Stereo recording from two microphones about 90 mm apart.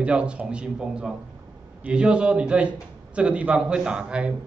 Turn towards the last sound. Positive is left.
turn(degrees=-10)  # may be behind; listen again after turning